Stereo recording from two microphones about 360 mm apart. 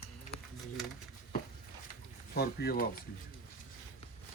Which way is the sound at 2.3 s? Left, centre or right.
Left.